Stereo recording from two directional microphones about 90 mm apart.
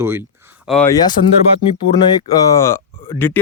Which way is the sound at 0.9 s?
50° left (ahead or behind).